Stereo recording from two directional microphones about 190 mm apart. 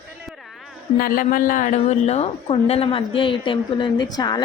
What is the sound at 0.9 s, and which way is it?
A woman's voice, 50° left (ahead or behind).